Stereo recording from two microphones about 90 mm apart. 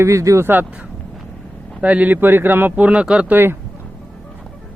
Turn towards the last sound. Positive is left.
turn(degrees=-25)  # may be behind; listen again after turning